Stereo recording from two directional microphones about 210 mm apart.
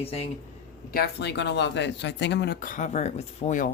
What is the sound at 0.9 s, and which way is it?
Speech, 50° left (ahead or behind).